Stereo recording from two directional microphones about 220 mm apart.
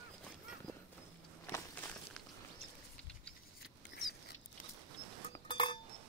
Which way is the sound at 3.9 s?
50° left (ahead or behind).